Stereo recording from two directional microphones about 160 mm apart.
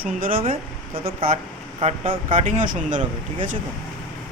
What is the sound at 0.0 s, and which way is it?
Speech, 65° right (ahead or behind).